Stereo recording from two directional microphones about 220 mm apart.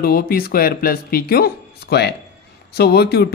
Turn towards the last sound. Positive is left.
turn(degrees=45)  # may be behind; listen again after turning